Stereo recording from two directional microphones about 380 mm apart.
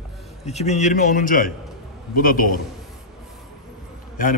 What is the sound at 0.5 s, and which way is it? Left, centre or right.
A man's voice, centre.